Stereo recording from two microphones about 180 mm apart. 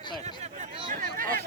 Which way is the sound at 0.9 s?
50° right (ahead or behind).